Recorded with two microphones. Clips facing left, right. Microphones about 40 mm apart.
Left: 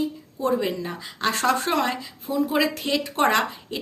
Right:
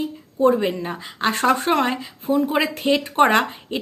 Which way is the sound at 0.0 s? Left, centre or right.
Right.